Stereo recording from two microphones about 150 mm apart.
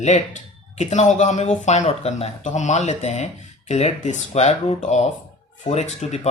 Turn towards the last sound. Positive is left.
turn(degrees=50)  # may be behind; listen again after turning